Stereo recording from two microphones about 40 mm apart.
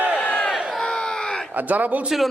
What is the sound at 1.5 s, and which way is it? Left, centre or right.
Speech, right.